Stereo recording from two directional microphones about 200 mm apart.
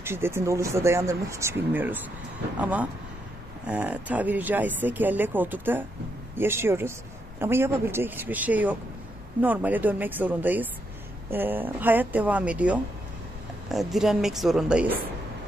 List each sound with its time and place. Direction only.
0.0 s a woman's voice: 10° right (ahead or behind)